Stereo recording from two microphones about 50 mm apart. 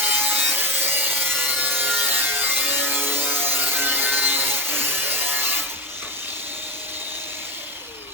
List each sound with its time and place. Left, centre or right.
0.1 s wood: right